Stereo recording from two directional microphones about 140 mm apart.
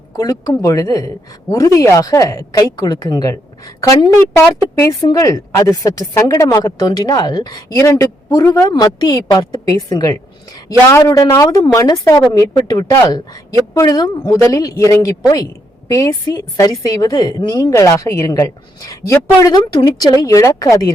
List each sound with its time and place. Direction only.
0.2 s a woman's voice: 25° left (ahead or behind)